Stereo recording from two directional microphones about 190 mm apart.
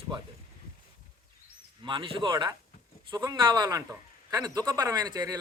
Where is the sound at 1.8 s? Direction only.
25° right (ahead or behind).